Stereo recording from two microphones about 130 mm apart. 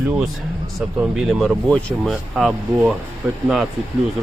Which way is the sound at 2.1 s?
5° right (ahead or behind).